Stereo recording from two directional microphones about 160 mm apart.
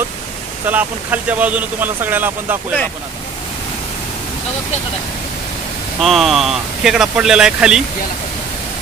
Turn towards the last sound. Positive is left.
turn(degrees=-5)  # may be behind; listen again after turning